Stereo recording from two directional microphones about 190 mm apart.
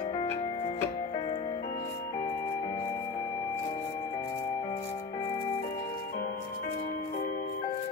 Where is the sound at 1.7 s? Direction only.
45° left (ahead or behind).